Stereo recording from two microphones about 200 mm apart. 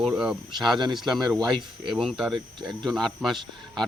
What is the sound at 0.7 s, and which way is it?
Speech, 20° right (ahead or behind).